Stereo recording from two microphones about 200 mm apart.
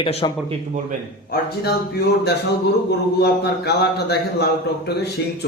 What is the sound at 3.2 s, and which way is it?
A man's voice, 55° left (ahead or behind).